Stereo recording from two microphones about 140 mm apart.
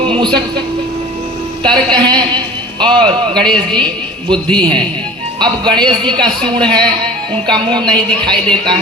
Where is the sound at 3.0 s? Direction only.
5° left (ahead or behind).